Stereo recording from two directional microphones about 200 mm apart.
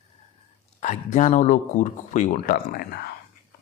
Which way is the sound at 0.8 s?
35° left (ahead or behind).